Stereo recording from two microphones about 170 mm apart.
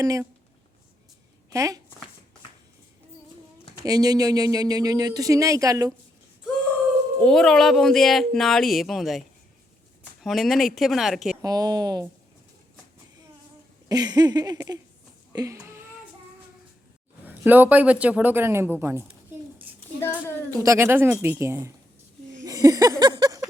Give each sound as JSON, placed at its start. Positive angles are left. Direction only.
{"t": 0.0, "sound": "speech", "side_deg": -20}
{"t": 1.5, "sound": "speech", "side_deg": -20}
{"t": 3.8, "sound": "speech", "side_deg": -20}
{"t": 7.2, "sound": "speech", "side_deg": 5}
{"t": 10.2, "sound": "speech", "side_deg": 0}
{"t": 11.4, "sound": "speech", "side_deg": -20}
{"t": 13.8, "sound": "speech", "side_deg": -20}
{"t": 15.3, "sound": "a sound", "side_deg": -15}
{"t": 17.2, "sound": "a man's voice", "side_deg": -10}
{"t": 20.5, "sound": "a man's voice", "side_deg": -20}
{"t": 22.4, "sound": "a sound", "side_deg": -20}